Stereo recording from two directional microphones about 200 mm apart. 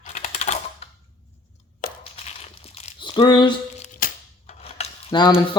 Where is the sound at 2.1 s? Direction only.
30° left (ahead or behind).